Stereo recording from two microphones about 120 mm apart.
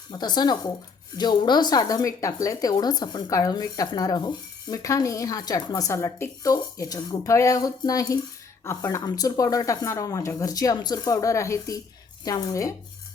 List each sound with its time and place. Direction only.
0.1 s speech: 35° left (ahead or behind)